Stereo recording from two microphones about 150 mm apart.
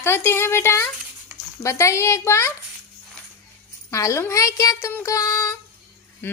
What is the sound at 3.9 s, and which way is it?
Child singing, 20° left (ahead or behind).